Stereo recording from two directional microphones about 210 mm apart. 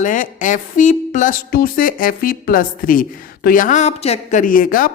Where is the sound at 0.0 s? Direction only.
40° left (ahead or behind).